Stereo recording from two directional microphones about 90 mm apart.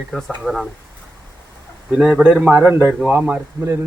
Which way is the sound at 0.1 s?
5° left (ahead or behind).